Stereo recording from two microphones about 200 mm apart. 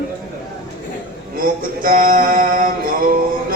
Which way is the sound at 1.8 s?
45° right (ahead or behind).